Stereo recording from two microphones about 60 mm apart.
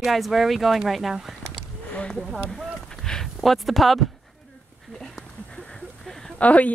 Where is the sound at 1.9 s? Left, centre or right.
Centre.